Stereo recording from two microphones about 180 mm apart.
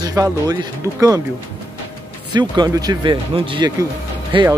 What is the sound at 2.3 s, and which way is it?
Speech, 25° right (ahead or behind).